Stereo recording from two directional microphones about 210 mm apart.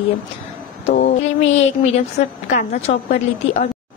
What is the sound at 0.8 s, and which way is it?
A woman's voice, 35° left (ahead or behind).